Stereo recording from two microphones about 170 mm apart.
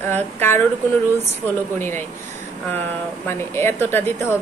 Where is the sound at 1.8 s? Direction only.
15° left (ahead or behind).